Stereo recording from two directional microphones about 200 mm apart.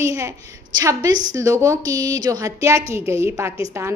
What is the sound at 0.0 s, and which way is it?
A woman's voice, 15° right (ahead or behind).